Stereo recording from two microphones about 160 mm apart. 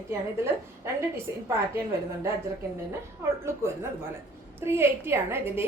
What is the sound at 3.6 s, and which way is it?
A woman's voice, 15° right (ahead or behind).